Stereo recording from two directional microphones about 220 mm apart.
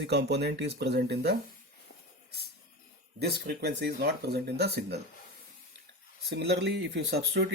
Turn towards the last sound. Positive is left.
turn(degrees=-50)  # may be behind; listen again after turning